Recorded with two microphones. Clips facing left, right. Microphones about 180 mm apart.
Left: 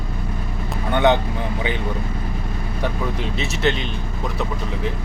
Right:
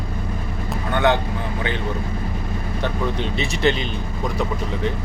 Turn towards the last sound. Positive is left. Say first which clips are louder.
# right 1 dB
turn(degrees=0)  # may be behind; listen again after turning